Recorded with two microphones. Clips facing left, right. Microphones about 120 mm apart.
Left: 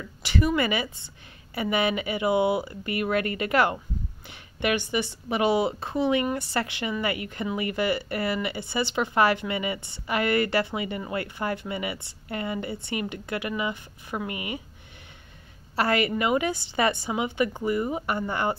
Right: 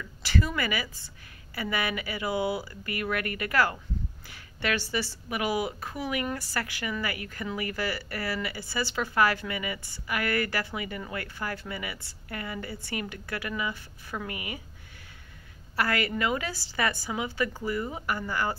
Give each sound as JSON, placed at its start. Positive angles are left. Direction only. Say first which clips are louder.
{"t": 0.2, "sound": "speech", "louder": "left 5 dB", "side_deg": 20}
{"t": 15.7, "sound": "speech", "louder": "left 4 dB", "side_deg": 25}